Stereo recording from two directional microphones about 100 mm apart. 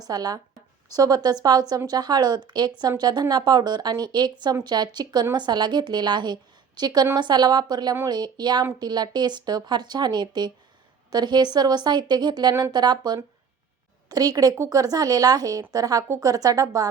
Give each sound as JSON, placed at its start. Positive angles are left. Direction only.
{"t": 0.0, "sound": "a woman's voice", "side_deg": -40}